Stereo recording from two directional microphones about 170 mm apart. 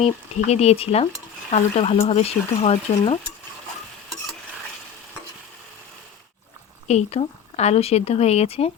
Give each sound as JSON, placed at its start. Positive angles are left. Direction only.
{"t": 0.0, "sound": "speech", "side_deg": 40}
{"t": 6.8, "sound": "speech", "side_deg": 40}